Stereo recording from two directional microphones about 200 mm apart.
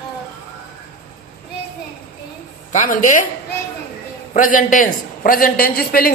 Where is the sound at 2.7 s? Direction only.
40° left (ahead or behind).